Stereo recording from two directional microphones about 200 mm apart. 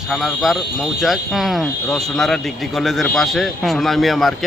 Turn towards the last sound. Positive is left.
turn(degrees=0)  # may be behind; listen again after turning